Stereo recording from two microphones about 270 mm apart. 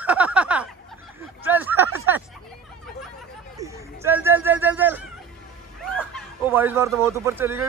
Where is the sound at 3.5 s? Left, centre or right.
Centre.